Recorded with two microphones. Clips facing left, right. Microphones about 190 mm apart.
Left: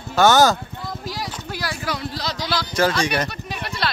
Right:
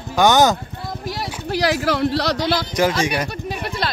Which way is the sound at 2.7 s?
15° right (ahead or behind).